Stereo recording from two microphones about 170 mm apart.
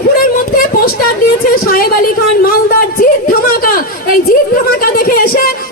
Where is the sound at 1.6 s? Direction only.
55° left (ahead or behind).